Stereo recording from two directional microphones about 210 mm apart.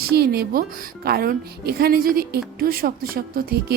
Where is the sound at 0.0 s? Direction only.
50° right (ahead or behind).